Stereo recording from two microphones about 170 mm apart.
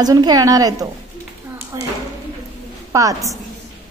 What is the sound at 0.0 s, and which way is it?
A woman's voice, 20° right (ahead or behind).